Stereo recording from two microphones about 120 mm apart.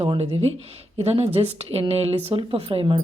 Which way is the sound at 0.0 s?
50° right (ahead or behind).